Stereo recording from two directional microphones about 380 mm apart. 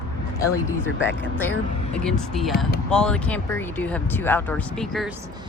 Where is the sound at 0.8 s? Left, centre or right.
Left.